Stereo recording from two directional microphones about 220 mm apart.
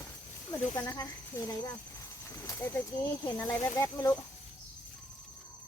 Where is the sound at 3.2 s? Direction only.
15° left (ahead or behind).